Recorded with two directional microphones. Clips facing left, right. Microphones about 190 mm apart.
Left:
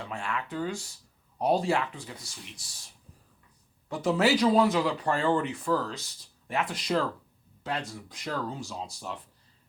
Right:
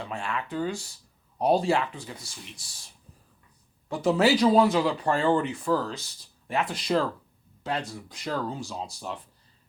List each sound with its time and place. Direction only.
0.0 s speech: 30° right (ahead or behind)
3.8 s speech: 30° right (ahead or behind)